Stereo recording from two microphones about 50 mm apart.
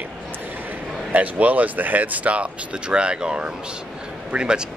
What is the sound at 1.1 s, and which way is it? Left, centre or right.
Speech, right.